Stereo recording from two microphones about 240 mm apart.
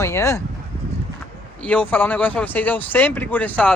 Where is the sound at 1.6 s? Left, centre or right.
Centre.